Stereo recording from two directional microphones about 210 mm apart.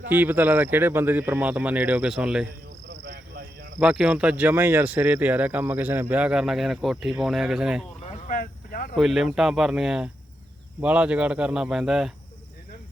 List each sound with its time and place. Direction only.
0.1 s speech: 10° right (ahead or behind)
3.0 s cricket: 50° right (ahead or behind)
3.8 s speech: 5° right (ahead or behind)
8.0 s a sound: 40° left (ahead or behind)
9.0 s speech: centre (ahead or behind)